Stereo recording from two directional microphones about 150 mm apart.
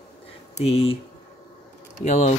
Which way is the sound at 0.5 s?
40° left (ahead or behind).